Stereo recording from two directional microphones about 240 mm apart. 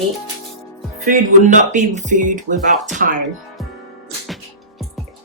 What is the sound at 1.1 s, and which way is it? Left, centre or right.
Speech, right.